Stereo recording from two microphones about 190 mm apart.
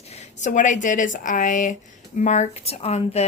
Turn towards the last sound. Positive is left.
turn(degrees=35)  # may be behind; listen again after turning